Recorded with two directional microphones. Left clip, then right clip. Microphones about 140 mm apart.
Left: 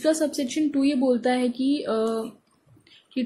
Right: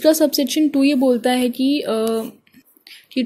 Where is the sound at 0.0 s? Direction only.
45° right (ahead or behind).